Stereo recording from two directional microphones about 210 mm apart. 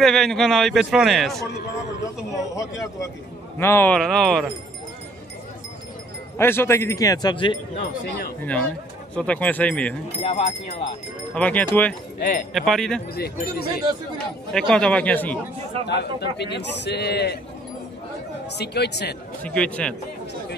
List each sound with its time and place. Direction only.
0.0 s a man's voice: centre (ahead or behind)
2.3 s a man's voice: 15° left (ahead or behind)
6.3 s speech: 10° left (ahead or behind)
9.1 s a man's voice: 5° left (ahead or behind)
10.2 s speech: 25° left (ahead or behind)
11.3 s speech: 5° left (ahead or behind)
12.2 s a man's voice: 45° left (ahead or behind)
12.5 s a man's voice: centre (ahead or behind)
13.1 s a man's voice: 50° left (ahead or behind)
14.1 s a man's voice: 5° left (ahead or behind)
15.9 s a man's voice: 55° left (ahead or behind)
18.6 s a man's voice: 50° left (ahead or behind)
19.4 s a man's voice: 5° left (ahead or behind)